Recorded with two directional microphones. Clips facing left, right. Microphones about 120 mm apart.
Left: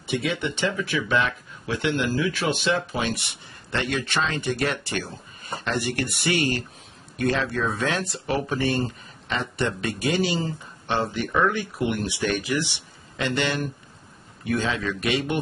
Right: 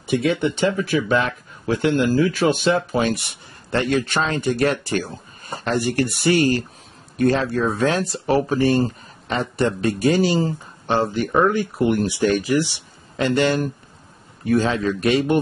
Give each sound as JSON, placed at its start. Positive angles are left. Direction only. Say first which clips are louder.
{"t": 0.0, "sound": "speech", "louder": "right 7 dB", "side_deg": -45}